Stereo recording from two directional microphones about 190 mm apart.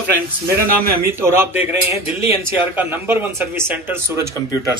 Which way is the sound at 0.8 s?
15° right (ahead or behind).